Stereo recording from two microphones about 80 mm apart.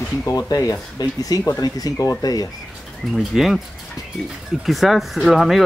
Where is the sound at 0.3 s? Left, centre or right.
Left.